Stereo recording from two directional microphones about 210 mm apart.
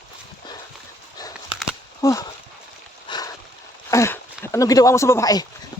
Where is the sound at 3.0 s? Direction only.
20° left (ahead or behind).